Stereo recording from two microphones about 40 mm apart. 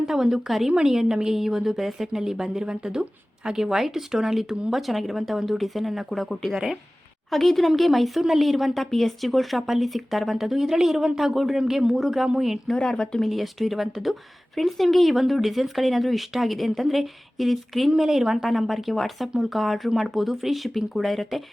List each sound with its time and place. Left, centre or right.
0.0 s a woman's voice: centre
0.8 s a woman's voice: centre
11.6 s a woman's voice: centre
11.9 s speech: centre
12.7 s a woman's voice: left
13.2 s speech: centre